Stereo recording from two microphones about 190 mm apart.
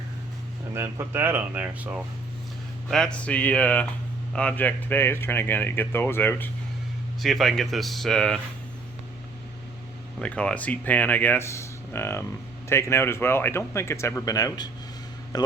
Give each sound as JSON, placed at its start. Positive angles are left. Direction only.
{"t": 0.7, "sound": "speech", "side_deg": -10}
{"t": 2.9, "sound": "speech", "side_deg": 5}
{"t": 10.2, "sound": "a man's voice", "side_deg": 5}